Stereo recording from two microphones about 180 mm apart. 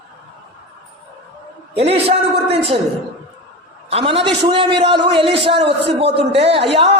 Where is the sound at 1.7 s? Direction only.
35° right (ahead or behind).